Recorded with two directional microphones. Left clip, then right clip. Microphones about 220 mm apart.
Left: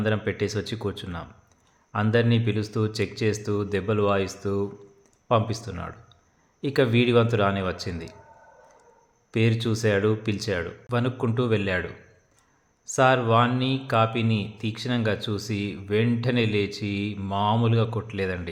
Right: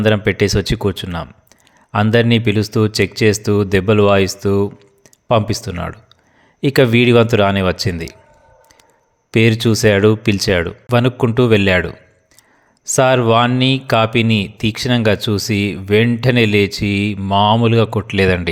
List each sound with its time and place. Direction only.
0.0 s speech: 40° right (ahead or behind)
9.3 s speech: 40° right (ahead or behind)